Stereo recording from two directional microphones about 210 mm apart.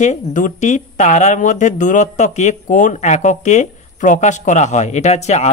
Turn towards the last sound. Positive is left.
turn(degrees=30)  # may be behind; listen again after turning